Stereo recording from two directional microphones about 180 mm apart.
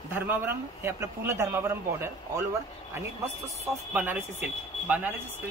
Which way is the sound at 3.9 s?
10° right (ahead or behind).